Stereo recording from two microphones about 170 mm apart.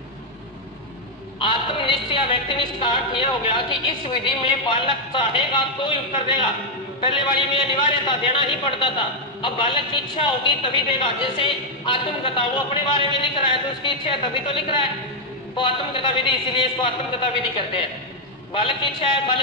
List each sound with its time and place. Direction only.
1.4 s a man's voice: 30° left (ahead or behind)